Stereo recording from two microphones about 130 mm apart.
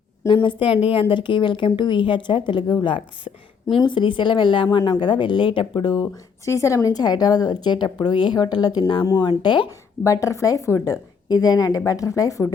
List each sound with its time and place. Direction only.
0.4 s speech: 40° left (ahead or behind)
6.4 s speech: 25° left (ahead or behind)
10.0 s a woman's voice: 25° left (ahead or behind)